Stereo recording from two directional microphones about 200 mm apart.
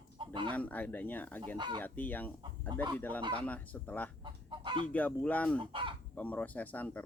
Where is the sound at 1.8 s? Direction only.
10° left (ahead or behind).